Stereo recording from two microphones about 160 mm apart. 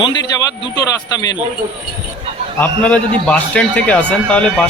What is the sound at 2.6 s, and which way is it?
Speech, 5° left (ahead or behind).